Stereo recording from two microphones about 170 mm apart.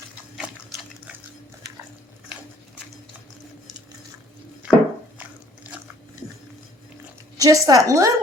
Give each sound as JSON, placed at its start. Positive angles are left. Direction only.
{"t": 4.6, "sound": "chopping", "side_deg": -10}
{"t": 7.3, "sound": "a sound", "side_deg": -20}
{"t": 7.7, "sound": "a woman's voice", "side_deg": -20}